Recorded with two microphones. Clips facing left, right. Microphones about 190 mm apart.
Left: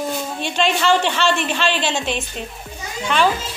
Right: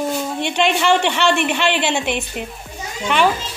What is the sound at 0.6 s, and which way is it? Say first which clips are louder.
Speech: right 1 dB; 15° right (ahead or behind).